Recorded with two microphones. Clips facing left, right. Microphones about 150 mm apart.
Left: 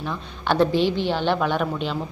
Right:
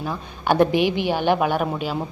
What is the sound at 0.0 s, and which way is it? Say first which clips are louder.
A woman's voice: right 2 dB; 10° right (ahead or behind).